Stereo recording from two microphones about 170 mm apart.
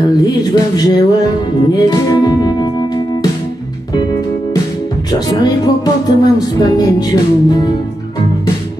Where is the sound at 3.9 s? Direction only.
20° left (ahead or behind).